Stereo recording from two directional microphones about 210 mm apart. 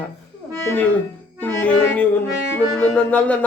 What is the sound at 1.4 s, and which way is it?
Music, 5° left (ahead or behind).